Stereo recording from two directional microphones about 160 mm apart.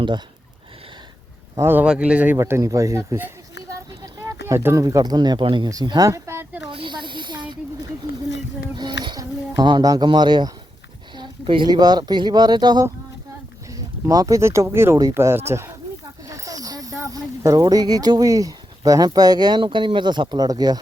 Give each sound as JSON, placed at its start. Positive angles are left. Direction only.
{"t": 1.5, "sound": "a man's voice", "side_deg": -15}
{"t": 3.7, "sound": "a sound", "side_deg": -20}
{"t": 4.4, "sound": "speech", "side_deg": -15}
{"t": 6.7, "sound": "snake", "side_deg": -30}
{"t": 8.7, "sound": "a sound", "side_deg": -25}
{"t": 9.0, "sound": "speech", "side_deg": -25}
{"t": 14.1, "sound": "a man's voice", "side_deg": -20}